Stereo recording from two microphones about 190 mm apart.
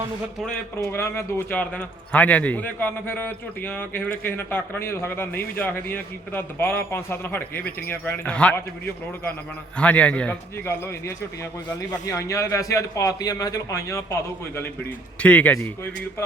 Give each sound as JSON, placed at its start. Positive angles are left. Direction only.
{"t": 0.3, "sound": "a man's voice", "side_deg": 5}